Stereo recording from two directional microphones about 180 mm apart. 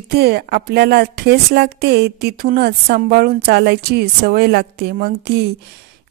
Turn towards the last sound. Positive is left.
turn(degrees=-60)  # may be behind; listen again after turning